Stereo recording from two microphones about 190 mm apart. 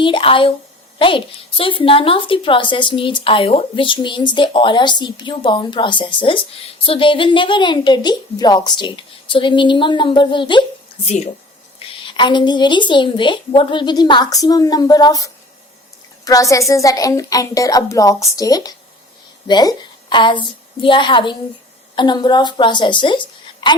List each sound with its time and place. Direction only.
0.0 s a woman's voice: 25° left (ahead or behind)